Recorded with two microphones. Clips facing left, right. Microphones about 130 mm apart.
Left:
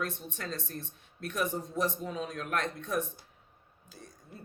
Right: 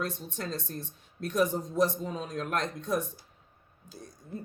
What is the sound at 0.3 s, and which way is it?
Speech, 40° right (ahead or behind).